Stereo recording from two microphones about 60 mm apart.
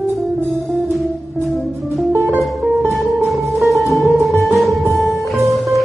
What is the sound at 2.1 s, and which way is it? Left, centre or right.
Music, right.